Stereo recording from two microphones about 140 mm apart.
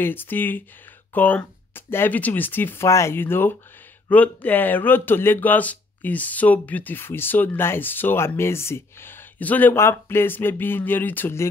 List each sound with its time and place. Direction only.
0.0 s speech: 15° left (ahead or behind)